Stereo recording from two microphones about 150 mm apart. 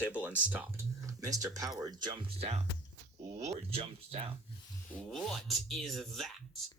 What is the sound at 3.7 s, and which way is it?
Speech, 40° right (ahead or behind).